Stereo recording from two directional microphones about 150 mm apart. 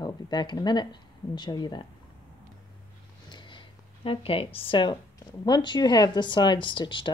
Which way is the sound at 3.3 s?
30° left (ahead or behind).